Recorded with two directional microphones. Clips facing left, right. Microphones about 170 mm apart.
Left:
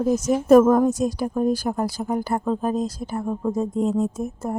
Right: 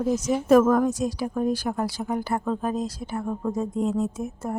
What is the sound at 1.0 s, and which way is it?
Speech, 45° left (ahead or behind).